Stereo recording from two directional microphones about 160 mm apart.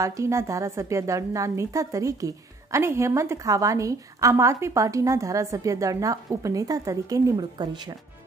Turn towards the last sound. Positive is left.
turn(degrees=-25)  # may be behind; listen again after turning